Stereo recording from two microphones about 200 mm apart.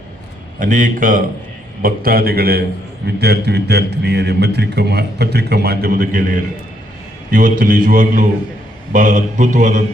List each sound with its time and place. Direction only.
0.6 s a man's voice: 40° right (ahead or behind)